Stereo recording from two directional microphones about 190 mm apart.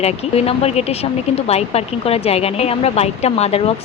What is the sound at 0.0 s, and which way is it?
A woman's voice, 30° left (ahead or behind).